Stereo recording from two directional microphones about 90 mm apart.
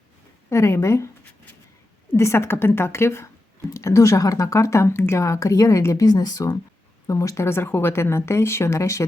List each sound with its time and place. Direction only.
0.5 s speech: 30° left (ahead or behind)
2.1 s a woman's voice: 30° left (ahead or behind)